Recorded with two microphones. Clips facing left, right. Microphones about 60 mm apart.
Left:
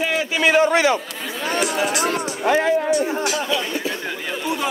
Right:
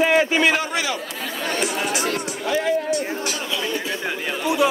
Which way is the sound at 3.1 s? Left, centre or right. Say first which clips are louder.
Left 5 dB; centre.